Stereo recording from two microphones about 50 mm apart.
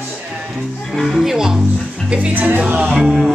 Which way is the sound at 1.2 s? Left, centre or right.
Centre.